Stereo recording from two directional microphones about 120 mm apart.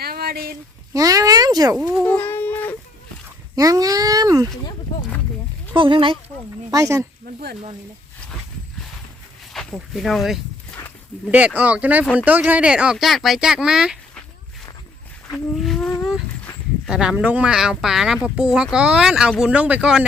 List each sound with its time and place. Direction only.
0.9 s speech: 30° right (ahead or behind)
2.0 s a sound: 15° left (ahead or behind)
3.5 s speech: 30° right (ahead or behind)
5.7 s speech: 45° right (ahead or behind)
6.7 s speech: 30° right (ahead or behind)
9.5 s speech: centre (ahead or behind)
10.7 s livestock: 15° left (ahead or behind)
11.3 s speech: 10° right (ahead or behind)
15.5 s a sound: centre (ahead or behind)
16.8 s speech: 5° right (ahead or behind)